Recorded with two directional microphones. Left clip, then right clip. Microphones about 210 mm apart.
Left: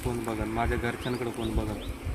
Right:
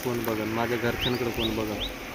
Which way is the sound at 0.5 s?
25° left (ahead or behind).